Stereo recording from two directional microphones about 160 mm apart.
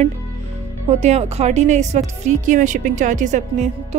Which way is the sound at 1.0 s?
45° right (ahead or behind).